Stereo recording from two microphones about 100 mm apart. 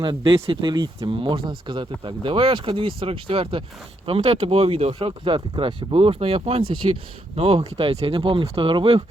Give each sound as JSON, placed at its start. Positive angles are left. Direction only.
{"t": 0.0, "sound": "speech", "side_deg": -50}
{"t": 4.0, "sound": "speech", "side_deg": -80}
{"t": 6.8, "sound": "speech", "side_deg": -65}
{"t": 7.3, "sound": "speech", "side_deg": -90}
{"t": 7.8, "sound": "speech", "side_deg": -70}